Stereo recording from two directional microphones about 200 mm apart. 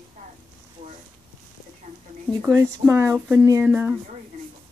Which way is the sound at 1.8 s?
35° right (ahead or behind).